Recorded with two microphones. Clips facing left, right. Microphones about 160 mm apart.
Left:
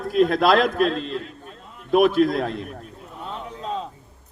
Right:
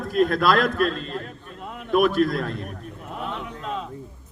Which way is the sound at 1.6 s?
70° right (ahead or behind).